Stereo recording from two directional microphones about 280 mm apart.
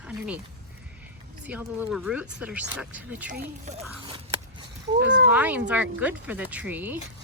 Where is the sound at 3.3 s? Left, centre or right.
Right.